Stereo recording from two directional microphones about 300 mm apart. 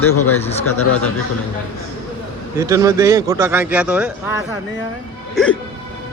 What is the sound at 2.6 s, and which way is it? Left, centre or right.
Speech, centre.